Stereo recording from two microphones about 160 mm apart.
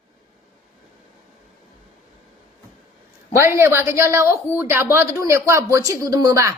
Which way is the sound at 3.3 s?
15° right (ahead or behind).